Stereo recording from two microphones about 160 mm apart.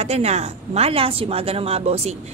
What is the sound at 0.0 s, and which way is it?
A woman's voice, 40° right (ahead or behind).